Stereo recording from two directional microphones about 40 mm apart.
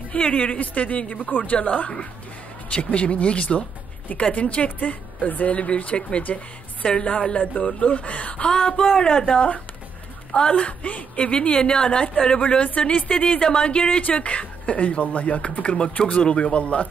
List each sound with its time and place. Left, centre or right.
0.3 s a woman's voice: left
8.5 s a woman's voice: centre
12.4 s speech: left
13.1 s a woman's voice: left